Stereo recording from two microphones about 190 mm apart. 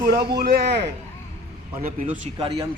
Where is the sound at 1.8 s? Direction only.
50° right (ahead or behind).